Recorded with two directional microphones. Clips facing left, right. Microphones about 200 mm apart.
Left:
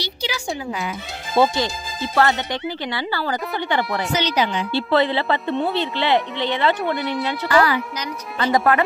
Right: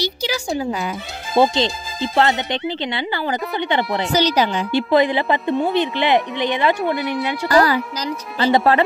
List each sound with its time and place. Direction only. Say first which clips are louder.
0.0 s a sound: right 5 dB; 40° right (ahead or behind)
0.6 s speech: right 5 dB; 35° right (ahead or behind)
1.3 s speech: right 2 dB; 20° right (ahead or behind)
4.1 s speech: right 5 dB; 40° right (ahead or behind)
4.7 s speech: right 3 dB; 15° right (ahead or behind)
6.8 s speech: right 2 dB; centre (ahead or behind)
7.4 s speech: right 3 dB; 40° right (ahead or behind)